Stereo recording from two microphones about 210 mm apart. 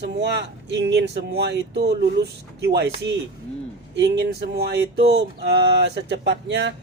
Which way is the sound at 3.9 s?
55° right (ahead or behind).